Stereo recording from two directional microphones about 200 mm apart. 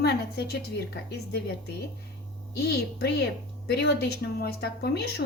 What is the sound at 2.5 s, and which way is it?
A woman's voice, 55° left (ahead or behind).